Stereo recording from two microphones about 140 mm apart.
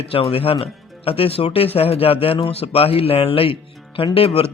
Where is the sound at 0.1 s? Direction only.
40° left (ahead or behind).